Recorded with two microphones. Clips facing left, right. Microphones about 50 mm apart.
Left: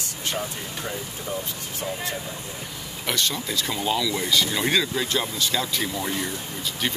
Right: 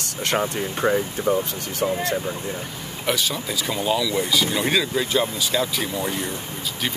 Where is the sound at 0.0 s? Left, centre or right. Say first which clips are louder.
Right 6 dB; right.